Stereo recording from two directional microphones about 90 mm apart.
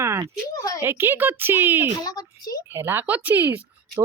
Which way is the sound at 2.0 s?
45° left (ahead or behind).